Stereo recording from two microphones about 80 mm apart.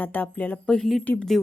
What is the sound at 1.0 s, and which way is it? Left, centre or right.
Speech, centre.